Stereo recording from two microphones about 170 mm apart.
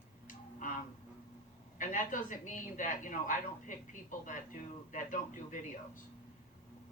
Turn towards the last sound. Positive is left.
turn(degrees=50)  # may be behind; listen again after turning